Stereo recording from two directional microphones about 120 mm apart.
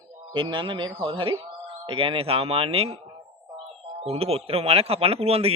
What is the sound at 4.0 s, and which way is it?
A man's voice, 55° right (ahead or behind).